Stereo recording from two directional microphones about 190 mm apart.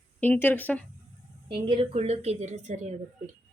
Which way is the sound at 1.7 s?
30° right (ahead or behind).